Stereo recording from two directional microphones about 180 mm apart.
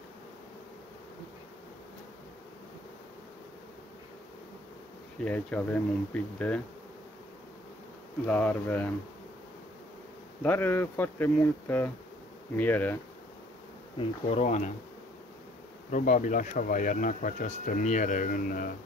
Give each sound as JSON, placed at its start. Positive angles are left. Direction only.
{"t": 5.2, "sound": "speech", "side_deg": 10}
{"t": 8.3, "sound": "speech", "side_deg": 10}
{"t": 10.4, "sound": "speech", "side_deg": 10}
{"t": 13.9, "sound": "bee", "side_deg": 35}
{"t": 15.9, "sound": "speech", "side_deg": 45}